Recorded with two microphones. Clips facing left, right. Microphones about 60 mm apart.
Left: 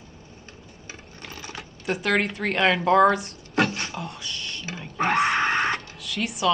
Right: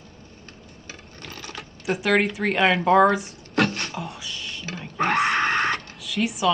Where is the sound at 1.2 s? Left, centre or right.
Centre.